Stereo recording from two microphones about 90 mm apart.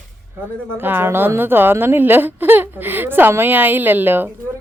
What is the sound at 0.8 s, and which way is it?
A woman's voice, 25° right (ahead or behind).